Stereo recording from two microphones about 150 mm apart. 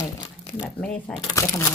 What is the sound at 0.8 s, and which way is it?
Speech, 5° left (ahead or behind).